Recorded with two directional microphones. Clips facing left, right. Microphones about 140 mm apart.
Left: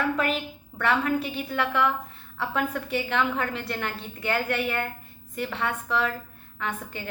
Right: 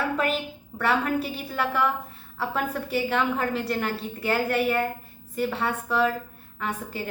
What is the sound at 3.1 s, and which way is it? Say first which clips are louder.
A woman's voice: right 1 dB; 40° right (ahead or behind).